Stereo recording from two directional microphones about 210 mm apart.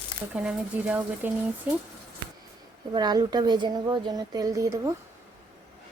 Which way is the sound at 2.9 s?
20° right (ahead or behind).